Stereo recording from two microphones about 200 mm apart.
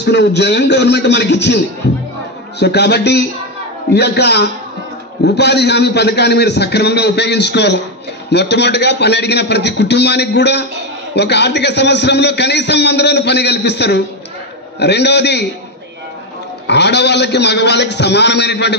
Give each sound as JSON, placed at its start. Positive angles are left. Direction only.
{"t": 0.0, "sound": "a man's voice", "side_deg": 60}
{"t": 2.6, "sound": "a man's voice", "side_deg": 55}
{"t": 16.6, "sound": "a man's voice", "side_deg": 60}